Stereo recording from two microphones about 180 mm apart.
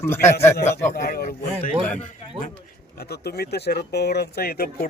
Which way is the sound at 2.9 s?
60° left (ahead or behind).